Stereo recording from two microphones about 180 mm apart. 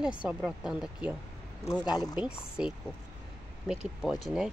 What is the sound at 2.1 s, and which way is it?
Speech, 5° right (ahead or behind).